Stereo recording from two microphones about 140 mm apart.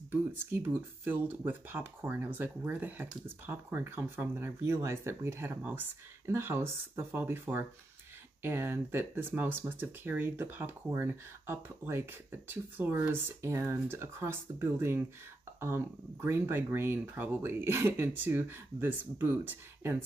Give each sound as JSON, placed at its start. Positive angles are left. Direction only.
{"t": 0.3, "sound": "speech", "side_deg": -15}